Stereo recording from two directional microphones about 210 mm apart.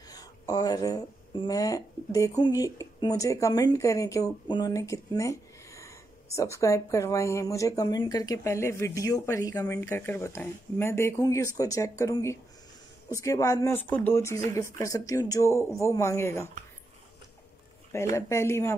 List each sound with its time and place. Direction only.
0.1 s a sound: 20° left (ahead or behind)
1.5 s speech: 15° left (ahead or behind)
18.1 s speech: 15° left (ahead or behind)